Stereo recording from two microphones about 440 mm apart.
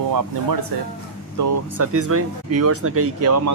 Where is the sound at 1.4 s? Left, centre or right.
Right.